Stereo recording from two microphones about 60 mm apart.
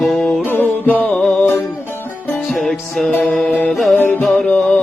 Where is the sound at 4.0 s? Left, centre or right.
Left.